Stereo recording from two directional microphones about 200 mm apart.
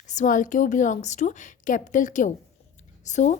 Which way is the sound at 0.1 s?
40° left (ahead or behind).